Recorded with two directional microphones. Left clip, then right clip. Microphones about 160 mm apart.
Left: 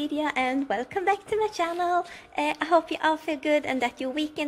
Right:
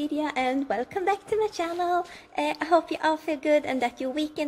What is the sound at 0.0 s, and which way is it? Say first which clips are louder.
A woman's voice: even; centre (ahead or behind).